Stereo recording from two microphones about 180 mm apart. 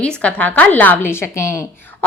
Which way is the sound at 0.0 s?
5° left (ahead or behind).